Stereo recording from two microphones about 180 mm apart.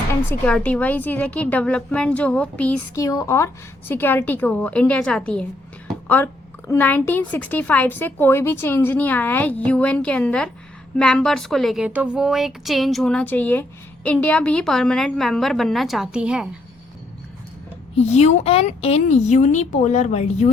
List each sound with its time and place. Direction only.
0.1 s a woman's voice: 10° left (ahead or behind)
3.0 s a woman's voice: 20° left (ahead or behind); by 16.5 s 5° right (ahead or behind)
17.9 s a woman's voice: 35° left (ahead or behind)